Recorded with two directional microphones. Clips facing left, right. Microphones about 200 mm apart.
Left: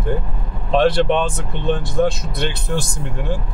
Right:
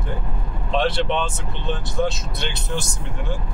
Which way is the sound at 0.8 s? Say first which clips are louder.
Left 7 dB; 55° left (ahead or behind).